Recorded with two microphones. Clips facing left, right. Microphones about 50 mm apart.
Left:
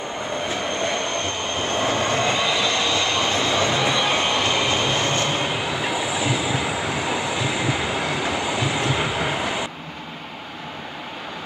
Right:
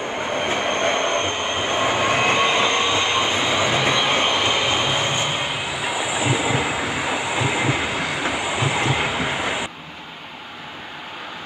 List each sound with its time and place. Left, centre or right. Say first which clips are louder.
0.4 s vehicle: right 4 dB; right; by 2.2 s centre
2.2 s train: right 3 dB; right
6.7 s vehicle: right 1 dB; centre
7.9 s train: even; centre
8.2 s train: right 1 dB; centre
9.2 s vehicle: even; centre